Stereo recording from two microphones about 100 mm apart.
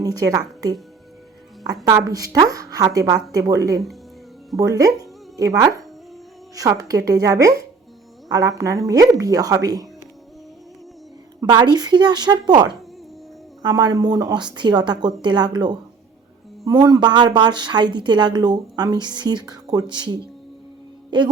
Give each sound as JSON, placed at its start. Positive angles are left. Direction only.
{"t": 0.0, "sound": "a woman's voice", "side_deg": -35}
{"t": 11.4, "sound": "speech", "side_deg": -45}